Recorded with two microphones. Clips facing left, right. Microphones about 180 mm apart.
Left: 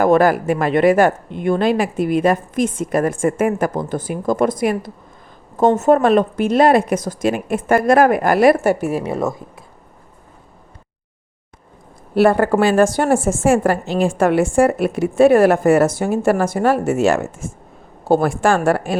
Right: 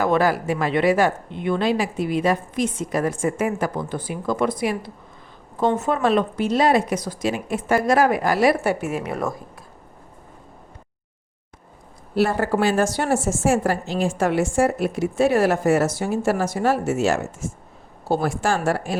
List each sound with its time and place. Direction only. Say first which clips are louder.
0.0 s speech: left 6 dB; 50° left (ahead or behind); by 9.4 s 25° left (ahead or behind)
12.1 s a woman's voice: left 6 dB; 60° left (ahead or behind)